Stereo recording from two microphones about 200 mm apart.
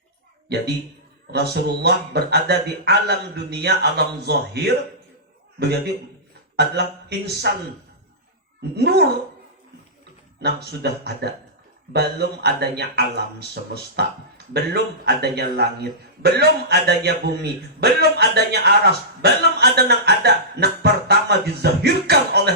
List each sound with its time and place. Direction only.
0.4 s a woman's voice: 55° right (ahead or behind)
8.7 s a man's voice: 55° right (ahead or behind)
10.4 s a man's voice: 55° right (ahead or behind)